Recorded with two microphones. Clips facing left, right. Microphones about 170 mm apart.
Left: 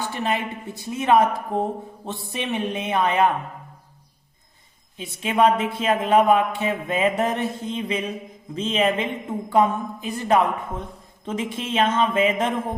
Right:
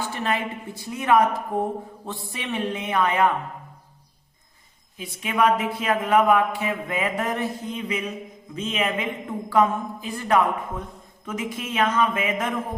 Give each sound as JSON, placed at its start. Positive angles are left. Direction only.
{"t": 0.0, "sound": "a woman's voice", "side_deg": 20}
{"t": 4.9, "sound": "a woman's voice", "side_deg": 25}